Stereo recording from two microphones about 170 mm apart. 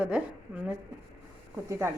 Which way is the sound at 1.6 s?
15° right (ahead or behind).